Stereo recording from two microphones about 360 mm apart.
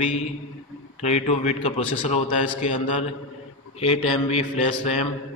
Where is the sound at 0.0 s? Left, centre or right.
Centre.